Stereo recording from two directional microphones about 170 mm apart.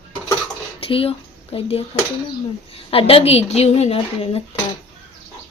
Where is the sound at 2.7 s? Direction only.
35° left (ahead or behind).